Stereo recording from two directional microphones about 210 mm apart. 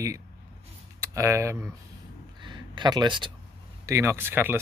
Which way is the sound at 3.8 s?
15° right (ahead or behind).